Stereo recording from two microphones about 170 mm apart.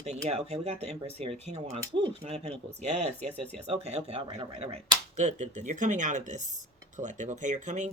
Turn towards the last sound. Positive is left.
turn(degrees=-45)  # may be behind; listen again after turning